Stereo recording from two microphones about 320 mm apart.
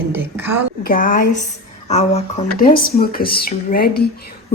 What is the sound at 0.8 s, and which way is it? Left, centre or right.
Speech, left.